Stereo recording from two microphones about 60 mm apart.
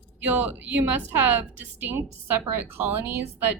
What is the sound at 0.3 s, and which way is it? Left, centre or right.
A woman's voice, right.